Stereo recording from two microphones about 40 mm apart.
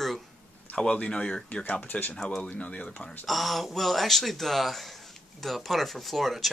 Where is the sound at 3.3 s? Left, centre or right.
Centre.